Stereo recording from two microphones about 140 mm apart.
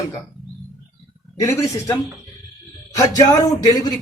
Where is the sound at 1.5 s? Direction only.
20° left (ahead or behind).